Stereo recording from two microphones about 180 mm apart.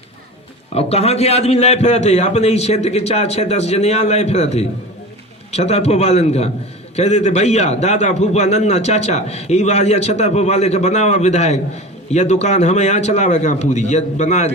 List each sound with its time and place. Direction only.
0.7 s a man's voice: 35° left (ahead or behind)